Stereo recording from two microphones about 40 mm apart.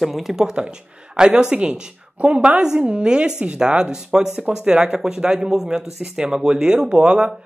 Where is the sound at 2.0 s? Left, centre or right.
Right.